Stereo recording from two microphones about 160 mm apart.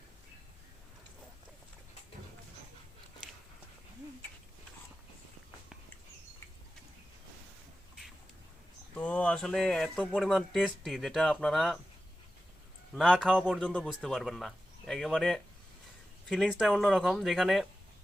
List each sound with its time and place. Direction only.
9.0 s speech: 10° left (ahead or behind)
12.9 s speech: centre (ahead or behind)